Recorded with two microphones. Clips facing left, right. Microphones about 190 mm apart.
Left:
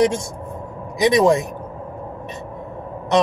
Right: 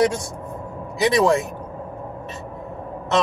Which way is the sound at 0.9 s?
20° left (ahead or behind).